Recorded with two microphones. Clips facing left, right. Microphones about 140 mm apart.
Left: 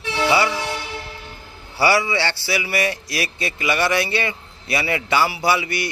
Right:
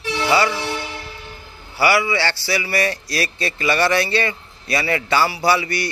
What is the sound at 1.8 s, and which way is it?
A man's voice, 30° left (ahead or behind).